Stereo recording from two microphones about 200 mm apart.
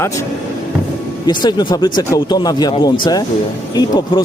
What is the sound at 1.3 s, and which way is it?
A man's voice, 20° left (ahead or behind).